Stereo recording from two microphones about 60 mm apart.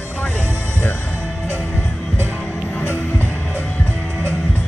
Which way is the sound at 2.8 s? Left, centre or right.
Left.